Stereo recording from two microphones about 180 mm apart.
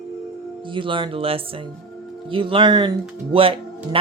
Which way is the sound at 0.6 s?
30° right (ahead or behind).